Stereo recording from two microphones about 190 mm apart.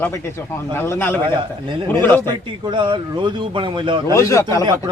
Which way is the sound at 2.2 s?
25° right (ahead or behind).